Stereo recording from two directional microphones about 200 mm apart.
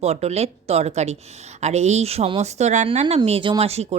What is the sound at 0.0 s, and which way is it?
Speech, 30° right (ahead or behind).